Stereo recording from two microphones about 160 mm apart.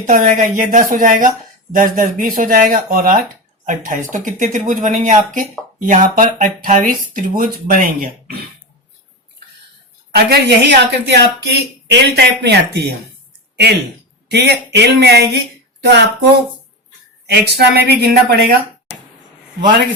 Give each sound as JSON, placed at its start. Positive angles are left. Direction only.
{"t": 0.0, "sound": "speech", "side_deg": -50}
{"t": 10.2, "sound": "speech", "side_deg": -90}
{"t": 14.3, "sound": "speech", "side_deg": -90}